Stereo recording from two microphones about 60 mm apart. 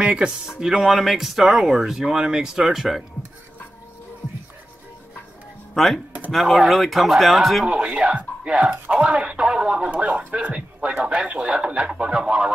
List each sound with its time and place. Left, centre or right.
0.0 s speech: centre
5.8 s speech: centre
6.3 s speech: centre
7.6 s speech: centre